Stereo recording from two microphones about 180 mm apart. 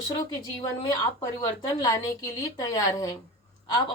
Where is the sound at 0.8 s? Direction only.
25° left (ahead or behind).